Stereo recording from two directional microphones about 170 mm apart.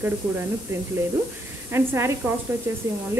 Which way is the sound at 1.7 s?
15° right (ahead or behind).